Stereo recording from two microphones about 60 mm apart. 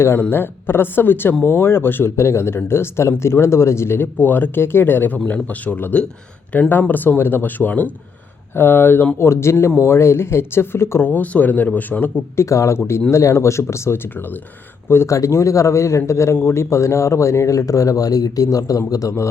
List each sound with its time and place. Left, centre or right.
0.3 s speech: left
8.5 s speech: left
9.1 s speech: left
11.0 s speech: left
12.4 s speech: left
15.0 s a man's voice: left